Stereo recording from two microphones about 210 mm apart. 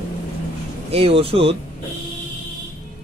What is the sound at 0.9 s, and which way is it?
Speech, 30° right (ahead or behind).